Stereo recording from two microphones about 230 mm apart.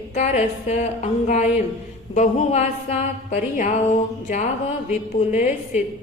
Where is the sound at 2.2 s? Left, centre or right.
Left.